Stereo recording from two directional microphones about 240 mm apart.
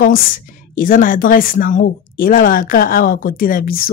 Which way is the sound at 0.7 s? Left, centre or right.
Left.